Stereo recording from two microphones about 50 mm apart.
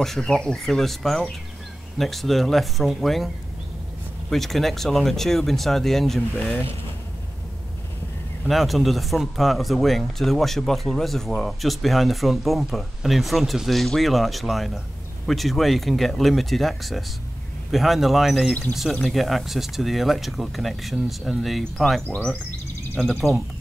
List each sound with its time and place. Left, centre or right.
0.0 s speech: centre
0.3 s speech: centre
0.6 s speech: centre
4.3 s speech: centre
8.5 s speech: centre
22.0 s speech: centre
22.9 s speech: centre